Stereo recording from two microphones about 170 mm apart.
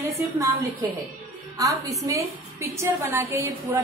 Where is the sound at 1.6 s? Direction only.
20° right (ahead or behind).